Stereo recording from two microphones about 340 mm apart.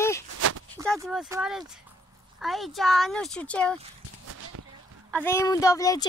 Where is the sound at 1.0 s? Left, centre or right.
Centre.